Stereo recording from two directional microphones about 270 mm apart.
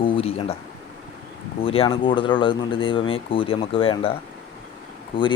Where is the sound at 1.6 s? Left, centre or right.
Left.